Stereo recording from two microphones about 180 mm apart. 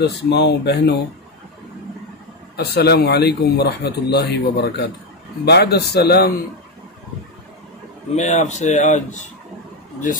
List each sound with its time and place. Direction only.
0.0 s speech: 70° left (ahead or behind)
2.5 s a man's voice: 65° left (ahead or behind)
8.2 s speech: 40° left (ahead or behind)